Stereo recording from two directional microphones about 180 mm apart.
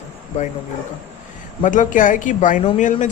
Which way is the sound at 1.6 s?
45° left (ahead or behind).